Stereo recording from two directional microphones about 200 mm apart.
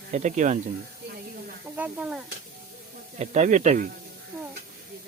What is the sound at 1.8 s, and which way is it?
Speech, 5° right (ahead or behind).